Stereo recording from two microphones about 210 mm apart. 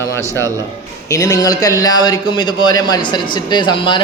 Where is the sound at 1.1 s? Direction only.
15° left (ahead or behind).